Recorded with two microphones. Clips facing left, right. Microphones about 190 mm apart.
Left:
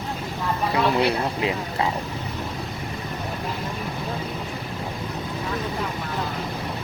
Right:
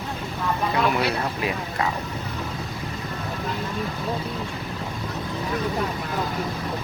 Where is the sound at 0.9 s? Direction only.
25° left (ahead or behind).